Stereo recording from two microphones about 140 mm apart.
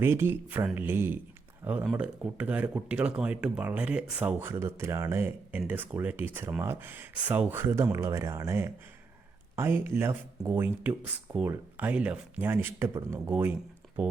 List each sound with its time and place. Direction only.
0.0 s speech: 15° right (ahead or behind)